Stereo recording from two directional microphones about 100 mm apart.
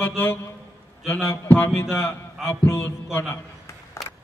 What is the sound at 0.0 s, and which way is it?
A man's voice, 20° left (ahead or behind).